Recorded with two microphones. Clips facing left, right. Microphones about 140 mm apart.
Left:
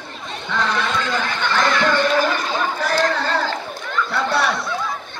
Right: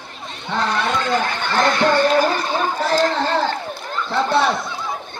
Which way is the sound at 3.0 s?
25° right (ahead or behind).